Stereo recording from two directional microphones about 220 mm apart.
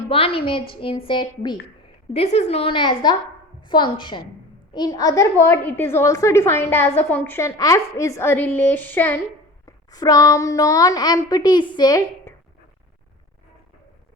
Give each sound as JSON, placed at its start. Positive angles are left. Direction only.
{"t": 0.1, "sound": "a woman's voice", "side_deg": 25}